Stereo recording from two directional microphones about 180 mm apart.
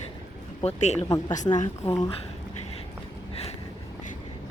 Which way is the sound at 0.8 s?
40° left (ahead or behind).